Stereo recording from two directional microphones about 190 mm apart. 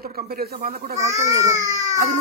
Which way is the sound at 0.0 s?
55° right (ahead or behind).